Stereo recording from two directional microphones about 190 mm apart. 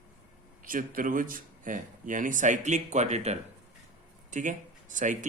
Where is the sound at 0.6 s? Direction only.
45° right (ahead or behind).